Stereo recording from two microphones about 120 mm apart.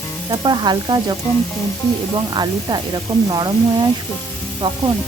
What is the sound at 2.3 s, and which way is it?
Sizzle, 35° right (ahead or behind).